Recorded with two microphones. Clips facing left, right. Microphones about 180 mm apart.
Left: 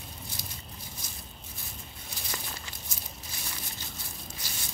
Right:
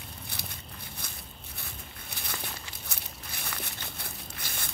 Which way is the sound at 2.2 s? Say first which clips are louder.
Even; 60° right (ahead or behind).